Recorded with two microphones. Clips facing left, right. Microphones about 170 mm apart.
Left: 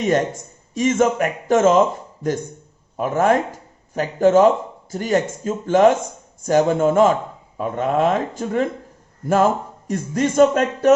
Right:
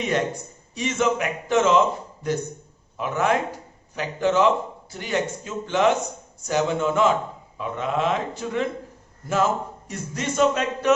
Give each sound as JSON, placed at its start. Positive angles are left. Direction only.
{"t": 0.0, "sound": "speech", "side_deg": 45}
{"t": 3.0, "sound": "speech", "side_deg": 45}
{"t": 9.9, "sound": "speech", "side_deg": 50}